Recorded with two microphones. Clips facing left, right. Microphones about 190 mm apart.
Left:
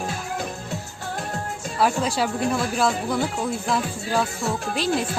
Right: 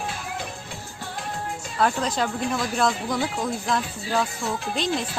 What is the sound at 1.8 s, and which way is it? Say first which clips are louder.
Speech: left 1 dB; 10° left (ahead or behind).